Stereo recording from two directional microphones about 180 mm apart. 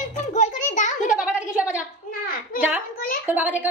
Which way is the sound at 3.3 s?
10° right (ahead or behind).